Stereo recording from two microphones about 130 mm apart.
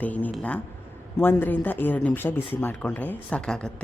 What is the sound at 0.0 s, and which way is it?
Speech, 10° left (ahead or behind).